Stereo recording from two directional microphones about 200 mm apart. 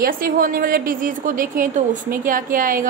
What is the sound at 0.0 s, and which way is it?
A woman's voice, 45° right (ahead or behind).